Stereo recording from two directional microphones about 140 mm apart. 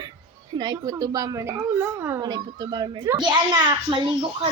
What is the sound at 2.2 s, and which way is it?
Speech, 30° right (ahead or behind).